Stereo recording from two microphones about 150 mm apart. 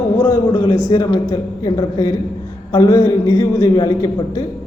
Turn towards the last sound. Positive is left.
turn(degrees=25)  # may be behind; listen again after turning